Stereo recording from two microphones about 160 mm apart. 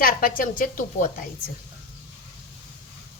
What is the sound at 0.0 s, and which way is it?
A woman's voice, 60° left (ahead or behind).